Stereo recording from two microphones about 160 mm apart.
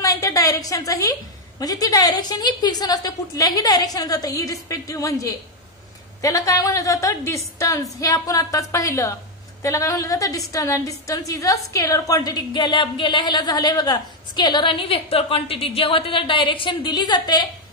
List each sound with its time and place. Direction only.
0.0 s a woman's voice: 20° left (ahead or behind)